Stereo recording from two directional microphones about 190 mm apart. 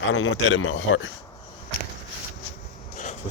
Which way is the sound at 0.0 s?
90° left.